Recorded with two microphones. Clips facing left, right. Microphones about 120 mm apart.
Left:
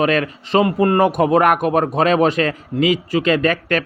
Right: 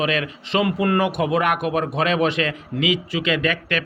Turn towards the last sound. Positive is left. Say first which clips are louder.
# left 5 dB
turn(degrees=40)  # may be behind; listen again after turning